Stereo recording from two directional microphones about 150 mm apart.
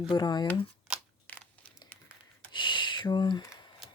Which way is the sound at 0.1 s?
30° left (ahead or behind).